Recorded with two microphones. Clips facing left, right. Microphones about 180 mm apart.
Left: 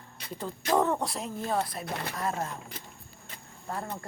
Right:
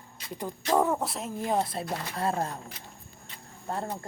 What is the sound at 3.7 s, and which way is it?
Speech, 30° right (ahead or behind).